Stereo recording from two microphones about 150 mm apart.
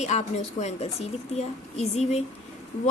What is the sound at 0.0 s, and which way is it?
A woman's voice, 50° left (ahead or behind).